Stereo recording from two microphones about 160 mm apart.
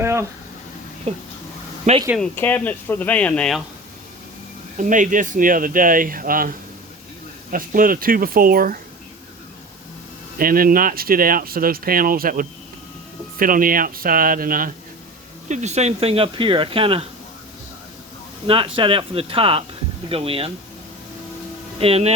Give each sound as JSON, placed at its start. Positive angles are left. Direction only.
{"t": 0.0, "sound": "a sound", "side_deg": -15}
{"t": 1.1, "sound": "speech", "side_deg": -40}
{"t": 2.3, "sound": "speech", "side_deg": 10}
{"t": 4.8, "sound": "speech", "side_deg": -55}
{"t": 7.5, "sound": "speech", "side_deg": -60}
{"t": 10.3, "sound": "speech", "side_deg": -65}
{"t": 15.4, "sound": "speech", "side_deg": -45}
{"t": 18.4, "sound": "speech", "side_deg": -35}
{"t": 21.8, "sound": "speech", "side_deg": -40}